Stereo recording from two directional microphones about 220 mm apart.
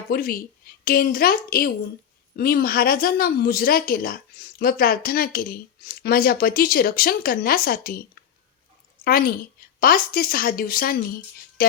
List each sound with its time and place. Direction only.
0.1 s a woman's voice: 40° left (ahead or behind)
9.0 s a woman's voice: 40° left (ahead or behind)